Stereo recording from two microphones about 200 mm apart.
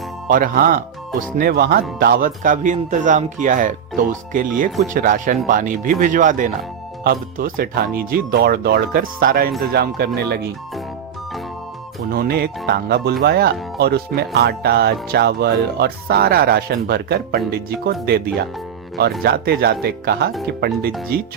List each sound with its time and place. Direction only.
0.3 s speech: 45° right (ahead or behind)
12.0 s speech: 50° right (ahead or behind)